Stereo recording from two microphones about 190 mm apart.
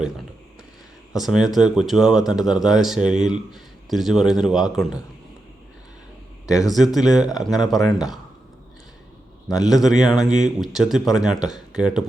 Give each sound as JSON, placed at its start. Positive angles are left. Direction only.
{"t": 1.1, "sound": "a man's voice", "side_deg": 0}
{"t": 6.4, "sound": "speech", "side_deg": 15}
{"t": 6.7, "sound": "speech", "side_deg": 0}
{"t": 9.6, "sound": "speech", "side_deg": 0}
{"t": 10.2, "sound": "speech", "side_deg": -40}
{"t": 10.6, "sound": "speech", "side_deg": 0}